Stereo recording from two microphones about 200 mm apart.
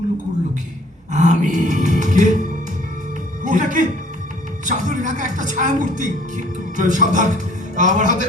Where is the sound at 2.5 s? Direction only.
40° right (ahead or behind).